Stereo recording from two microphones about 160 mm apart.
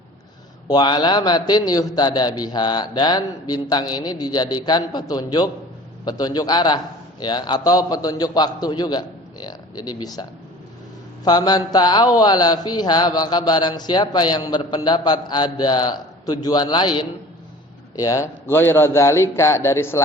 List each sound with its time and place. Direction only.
0.7 s speech: 25° left (ahead or behind)
11.3 s a man's voice: 25° left (ahead or behind)